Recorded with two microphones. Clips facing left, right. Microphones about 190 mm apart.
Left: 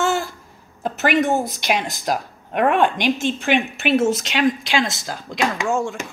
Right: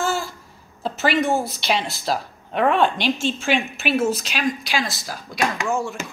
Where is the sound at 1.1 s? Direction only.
20° left (ahead or behind).